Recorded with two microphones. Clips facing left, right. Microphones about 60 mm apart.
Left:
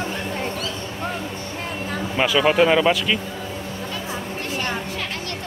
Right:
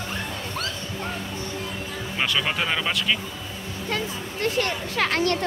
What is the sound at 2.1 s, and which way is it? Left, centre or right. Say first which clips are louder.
Speech: left 8 dB; centre.